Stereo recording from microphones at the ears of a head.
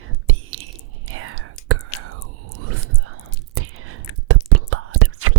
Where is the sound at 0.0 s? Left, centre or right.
Right.